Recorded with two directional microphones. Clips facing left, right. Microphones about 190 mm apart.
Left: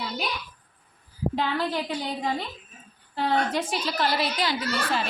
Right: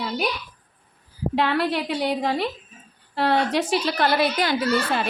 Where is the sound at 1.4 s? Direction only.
70° right (ahead or behind); by 4.5 s 55° right (ahead or behind).